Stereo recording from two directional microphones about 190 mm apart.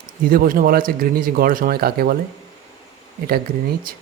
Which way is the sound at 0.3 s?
50° right (ahead or behind).